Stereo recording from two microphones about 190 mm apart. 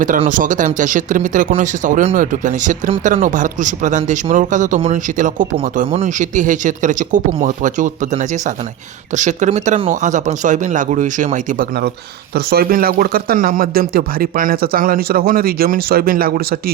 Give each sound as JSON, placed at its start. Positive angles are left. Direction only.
{"t": 0.3, "sound": "speech", "side_deg": -45}